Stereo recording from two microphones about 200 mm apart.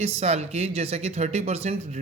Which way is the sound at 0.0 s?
30° right (ahead or behind).